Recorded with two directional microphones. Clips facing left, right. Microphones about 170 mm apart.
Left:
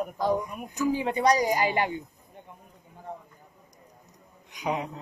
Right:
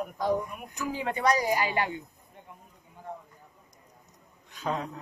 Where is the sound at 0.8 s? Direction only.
20° left (ahead or behind).